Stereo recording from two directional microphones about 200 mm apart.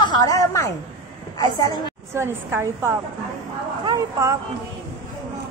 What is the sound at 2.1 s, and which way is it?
A woman's voice, 15° right (ahead or behind).